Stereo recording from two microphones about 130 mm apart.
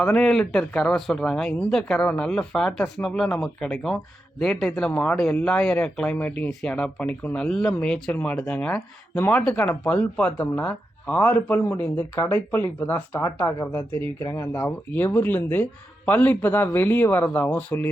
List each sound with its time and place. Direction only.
0.0 s speech: 5° left (ahead or behind)